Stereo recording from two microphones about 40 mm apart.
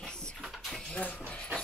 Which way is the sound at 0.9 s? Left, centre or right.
Left.